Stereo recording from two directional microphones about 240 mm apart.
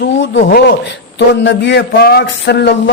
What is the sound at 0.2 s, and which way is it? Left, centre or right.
Speech, left.